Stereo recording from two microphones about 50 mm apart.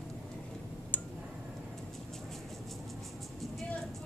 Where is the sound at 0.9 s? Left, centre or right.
Left.